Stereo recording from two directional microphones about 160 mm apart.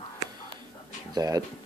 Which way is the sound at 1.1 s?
25° right (ahead or behind).